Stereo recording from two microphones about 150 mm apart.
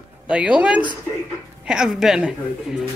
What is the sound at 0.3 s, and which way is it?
Speech, 5° right (ahead or behind).